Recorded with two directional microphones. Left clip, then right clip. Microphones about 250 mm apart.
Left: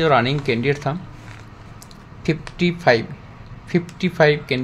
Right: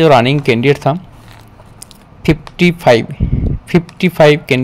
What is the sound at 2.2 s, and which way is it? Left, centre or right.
Speech, right.